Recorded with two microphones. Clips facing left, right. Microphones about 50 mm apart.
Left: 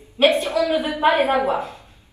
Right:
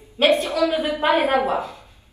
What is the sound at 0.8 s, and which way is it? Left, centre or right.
Speech, left.